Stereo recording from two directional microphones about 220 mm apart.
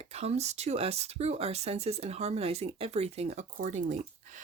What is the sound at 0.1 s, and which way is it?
Speech, 30° right (ahead or behind).